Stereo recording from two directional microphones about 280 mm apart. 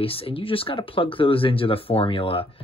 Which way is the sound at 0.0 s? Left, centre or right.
Centre.